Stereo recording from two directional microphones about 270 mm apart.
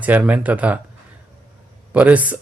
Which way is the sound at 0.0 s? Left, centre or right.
Centre.